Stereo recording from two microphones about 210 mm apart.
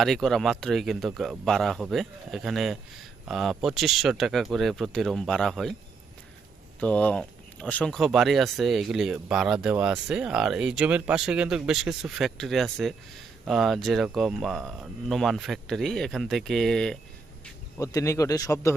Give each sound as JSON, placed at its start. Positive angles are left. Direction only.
{"t": 0.0, "sound": "speech", "side_deg": 0}
{"t": 6.7, "sound": "speech", "side_deg": 5}
{"t": 17.9, "sound": "a man's voice", "side_deg": 15}